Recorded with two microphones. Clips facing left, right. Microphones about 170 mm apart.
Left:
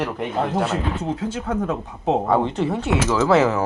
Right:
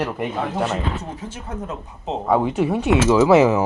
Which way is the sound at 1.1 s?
85° left.